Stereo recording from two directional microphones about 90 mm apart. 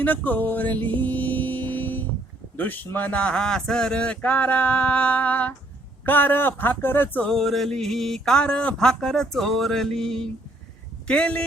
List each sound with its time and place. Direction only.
0.0 s music: 20° left (ahead or behind)
2.6 s speech: 20° left (ahead or behind)
7.3 s speech: 5° left (ahead or behind)